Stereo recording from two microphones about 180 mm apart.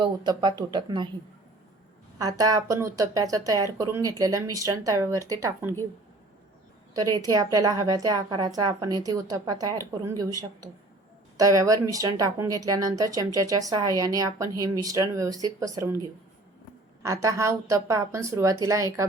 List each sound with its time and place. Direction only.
0.0 s a woman's voice: 25° right (ahead or behind)
2.1 s a woman's voice: 20° right (ahead or behind)
6.9 s a woman's voice: 20° right (ahead or behind)
17.0 s a woman's voice: 15° right (ahead or behind)